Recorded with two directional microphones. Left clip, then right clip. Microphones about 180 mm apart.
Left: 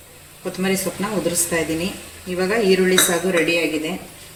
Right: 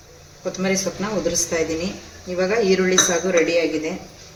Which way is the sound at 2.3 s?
25° left (ahead or behind).